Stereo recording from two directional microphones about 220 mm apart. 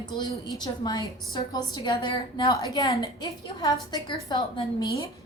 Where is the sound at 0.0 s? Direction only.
20° left (ahead or behind).